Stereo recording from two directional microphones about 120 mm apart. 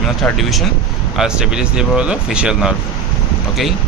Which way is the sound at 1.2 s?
5° right (ahead or behind).